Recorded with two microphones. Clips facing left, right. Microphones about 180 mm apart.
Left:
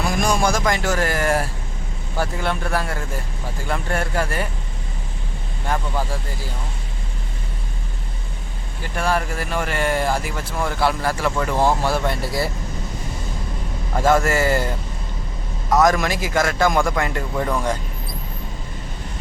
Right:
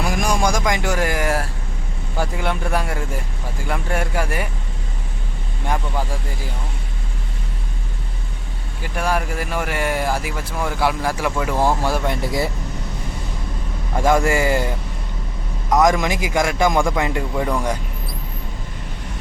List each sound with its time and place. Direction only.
0.0 s speech: 10° right (ahead or behind)
5.6 s speech: 10° right (ahead or behind)
8.8 s speech: 10° right (ahead or behind)
13.9 s speech: 15° right (ahead or behind)
15.7 s speech: 15° right (ahead or behind)